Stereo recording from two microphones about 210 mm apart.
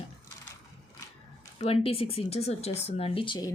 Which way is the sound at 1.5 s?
25° left (ahead or behind).